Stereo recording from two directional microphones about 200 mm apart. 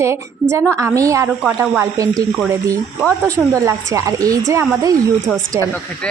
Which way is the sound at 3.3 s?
15° right (ahead or behind).